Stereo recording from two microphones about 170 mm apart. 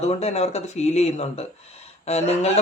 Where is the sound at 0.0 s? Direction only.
40° left (ahead or behind).